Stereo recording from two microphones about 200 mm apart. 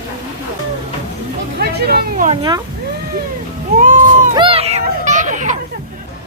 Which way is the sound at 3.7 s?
40° right (ahead or behind).